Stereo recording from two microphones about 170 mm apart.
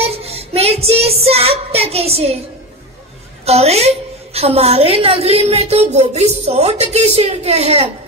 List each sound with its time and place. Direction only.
0.0 s child singing: 35° right (ahead or behind)
3.4 s a woman's voice: 40° right (ahead or behind)